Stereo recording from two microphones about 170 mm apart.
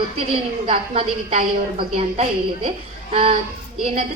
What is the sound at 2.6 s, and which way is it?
Speech, 35° right (ahead or behind).